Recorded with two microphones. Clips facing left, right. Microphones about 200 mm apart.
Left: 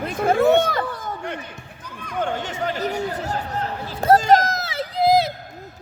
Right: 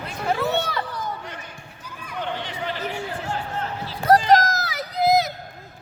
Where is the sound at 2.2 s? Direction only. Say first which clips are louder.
Left 5 dB; 45° left (ahead or behind).